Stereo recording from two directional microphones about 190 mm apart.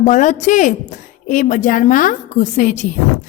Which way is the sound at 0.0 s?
40° left (ahead or behind).